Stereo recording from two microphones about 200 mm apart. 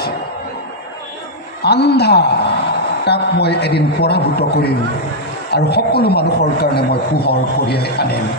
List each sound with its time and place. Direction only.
1.6 s a woman's voice: 55° left (ahead or behind)